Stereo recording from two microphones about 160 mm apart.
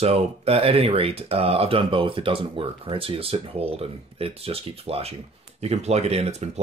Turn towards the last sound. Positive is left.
turn(degrees=-40)  # may be behind; listen again after turning